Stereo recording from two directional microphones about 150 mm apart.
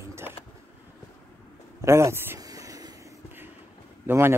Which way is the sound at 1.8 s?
20° right (ahead or behind).